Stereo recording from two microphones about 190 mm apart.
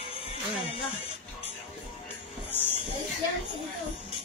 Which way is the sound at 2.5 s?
10° left (ahead or behind).